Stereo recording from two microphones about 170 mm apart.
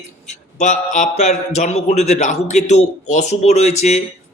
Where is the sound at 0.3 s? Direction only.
45° left (ahead or behind).